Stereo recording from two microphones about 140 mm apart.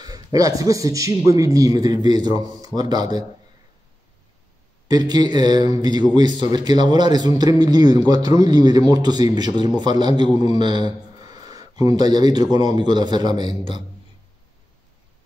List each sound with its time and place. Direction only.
0.0 s a man's voice: 25° right (ahead or behind)
4.8 s a man's voice: 30° right (ahead or behind)